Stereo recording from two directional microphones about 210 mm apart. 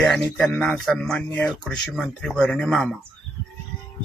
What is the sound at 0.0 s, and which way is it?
Speech, centre (ahead or behind).